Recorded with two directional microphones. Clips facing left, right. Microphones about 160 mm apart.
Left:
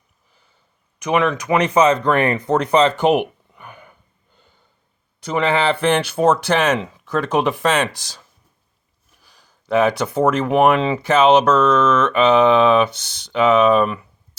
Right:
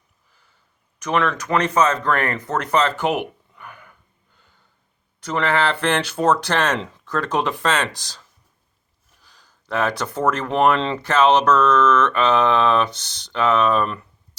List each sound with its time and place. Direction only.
0.9 s speech: 15° left (ahead or behind)
3.0 s a sound: 20° left (ahead or behind)
5.2 s speech: 15° left (ahead or behind)
9.2 s speech: 10° left (ahead or behind)